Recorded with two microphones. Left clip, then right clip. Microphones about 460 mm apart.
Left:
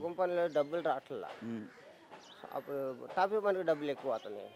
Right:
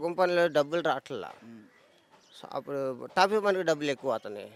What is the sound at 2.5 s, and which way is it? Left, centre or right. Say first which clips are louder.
Speech: right 6 dB; right.